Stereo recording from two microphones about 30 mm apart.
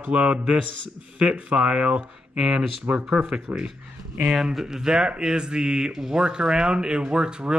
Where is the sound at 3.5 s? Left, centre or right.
Right.